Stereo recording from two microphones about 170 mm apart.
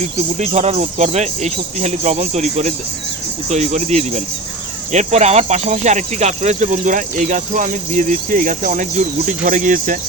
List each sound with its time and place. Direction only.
0.0 s speech: 40° right (ahead or behind)